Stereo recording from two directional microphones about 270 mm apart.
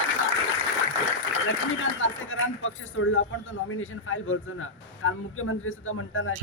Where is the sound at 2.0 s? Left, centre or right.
Left.